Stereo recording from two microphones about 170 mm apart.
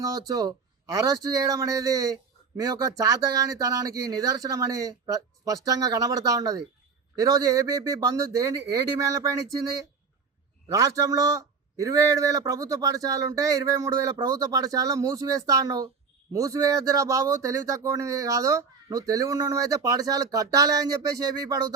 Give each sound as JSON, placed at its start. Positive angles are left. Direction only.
{"t": 0.0, "sound": "speech", "side_deg": -20}
{"t": 10.7, "sound": "speech", "side_deg": -20}